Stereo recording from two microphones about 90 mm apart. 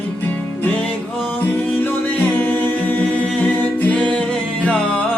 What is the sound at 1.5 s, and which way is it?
Music, 20° left (ahead or behind).